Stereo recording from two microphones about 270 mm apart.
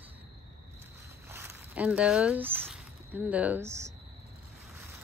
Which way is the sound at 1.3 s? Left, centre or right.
Centre.